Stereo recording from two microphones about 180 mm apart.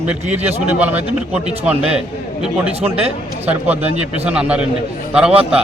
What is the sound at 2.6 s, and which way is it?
Speech, 35° right (ahead or behind).